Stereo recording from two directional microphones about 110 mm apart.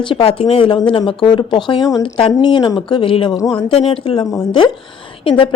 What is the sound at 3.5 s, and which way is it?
Speech, 60° left (ahead or behind).